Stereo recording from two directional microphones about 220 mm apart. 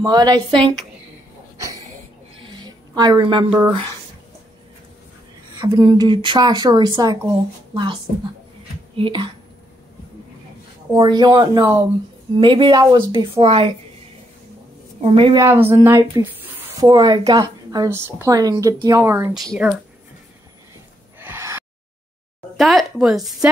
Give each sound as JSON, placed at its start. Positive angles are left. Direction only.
{"t": 0.0, "sound": "speech", "side_deg": -20}
{"t": 2.5, "sound": "speech", "side_deg": -20}
{"t": 5.6, "sound": "speech", "side_deg": -20}
{"t": 10.9, "sound": "speech", "side_deg": -20}
{"t": 15.0, "sound": "speech", "side_deg": -25}
{"t": 15.4, "sound": "speech", "side_deg": -10}
{"t": 19.3, "sound": "speech", "side_deg": 0}
{"t": 21.2, "sound": "gasp", "side_deg": -10}
{"t": 22.6, "sound": "speech", "side_deg": 0}